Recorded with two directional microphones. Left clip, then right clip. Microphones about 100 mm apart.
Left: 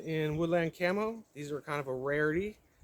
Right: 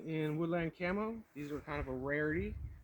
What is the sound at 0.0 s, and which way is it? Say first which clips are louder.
Speech: left 5 dB; 35° left (ahead or behind).